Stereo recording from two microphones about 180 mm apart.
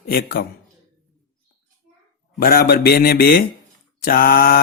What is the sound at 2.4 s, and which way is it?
A man's voice, 60° left (ahead or behind).